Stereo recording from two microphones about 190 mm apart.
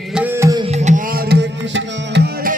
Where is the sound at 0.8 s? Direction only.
40° right (ahead or behind).